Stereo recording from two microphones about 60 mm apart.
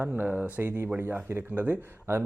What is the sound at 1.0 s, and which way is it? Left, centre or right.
Speech, right.